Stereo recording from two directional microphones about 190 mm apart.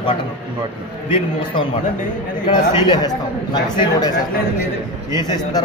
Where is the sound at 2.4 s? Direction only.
25° left (ahead or behind).